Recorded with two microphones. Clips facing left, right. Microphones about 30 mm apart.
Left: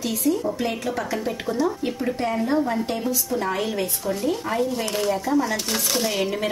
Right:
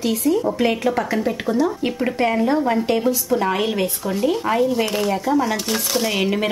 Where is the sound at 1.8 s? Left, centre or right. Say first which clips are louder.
Right 5 dB; right.